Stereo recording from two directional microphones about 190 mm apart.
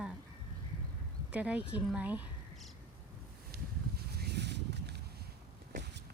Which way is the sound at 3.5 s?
55° right (ahead or behind).